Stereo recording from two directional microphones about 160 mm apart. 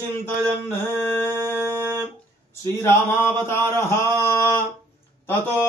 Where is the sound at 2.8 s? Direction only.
15° left (ahead or behind).